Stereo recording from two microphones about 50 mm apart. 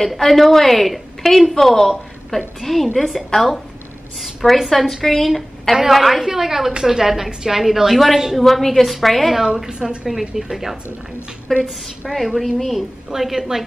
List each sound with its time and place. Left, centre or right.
0.0 s a woman's voice: centre
9.6 s speech: centre
11.5 s a woman's voice: centre